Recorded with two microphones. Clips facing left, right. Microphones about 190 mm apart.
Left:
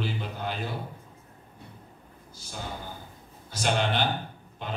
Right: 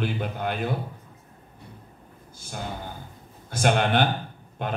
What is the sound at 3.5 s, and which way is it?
A man's voice, 55° right (ahead or behind).